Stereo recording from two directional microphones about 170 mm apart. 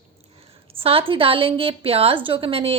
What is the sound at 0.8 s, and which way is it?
A woman's voice, 35° right (ahead or behind).